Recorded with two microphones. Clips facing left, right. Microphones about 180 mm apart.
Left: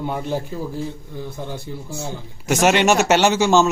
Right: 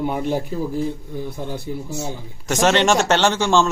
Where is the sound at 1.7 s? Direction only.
10° right (ahead or behind).